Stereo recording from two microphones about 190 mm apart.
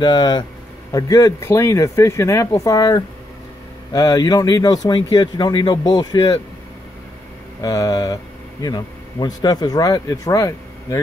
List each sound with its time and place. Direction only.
0.0 s speech: 20° left (ahead or behind)
7.6 s speech: 20° left (ahead or behind)